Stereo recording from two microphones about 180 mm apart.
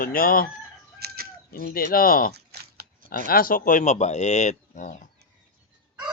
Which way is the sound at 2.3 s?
65° right (ahead or behind).